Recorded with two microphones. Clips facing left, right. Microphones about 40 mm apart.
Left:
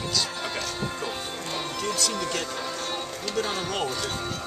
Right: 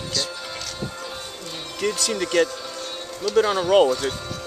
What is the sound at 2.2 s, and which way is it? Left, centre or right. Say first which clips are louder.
Speech: right 8 dB; right.